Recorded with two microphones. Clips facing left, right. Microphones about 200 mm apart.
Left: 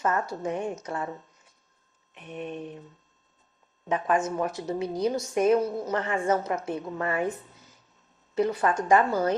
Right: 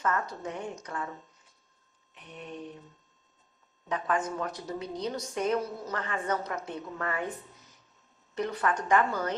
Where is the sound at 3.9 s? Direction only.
25° left (ahead or behind).